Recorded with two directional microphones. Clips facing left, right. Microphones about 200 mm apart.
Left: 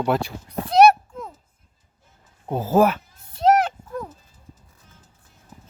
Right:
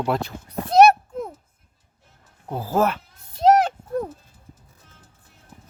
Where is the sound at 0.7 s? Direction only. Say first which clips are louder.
Even; 45° right (ahead or behind).